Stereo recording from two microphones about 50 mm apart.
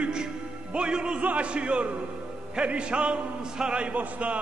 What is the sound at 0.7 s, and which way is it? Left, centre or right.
A man's voice, centre.